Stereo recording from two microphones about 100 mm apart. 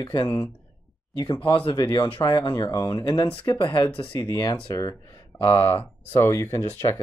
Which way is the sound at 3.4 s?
50° left (ahead or behind).